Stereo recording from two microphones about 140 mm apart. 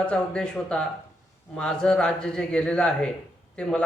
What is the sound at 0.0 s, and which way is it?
A man's voice, 5° left (ahead or behind).